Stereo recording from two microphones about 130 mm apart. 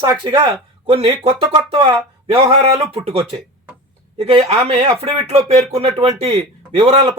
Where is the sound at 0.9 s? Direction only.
45° right (ahead or behind).